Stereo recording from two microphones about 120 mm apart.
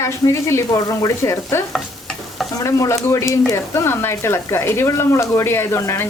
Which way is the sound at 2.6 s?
25° left (ahead or behind).